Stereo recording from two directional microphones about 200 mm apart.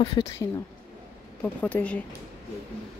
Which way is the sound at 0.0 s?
25° left (ahead or behind).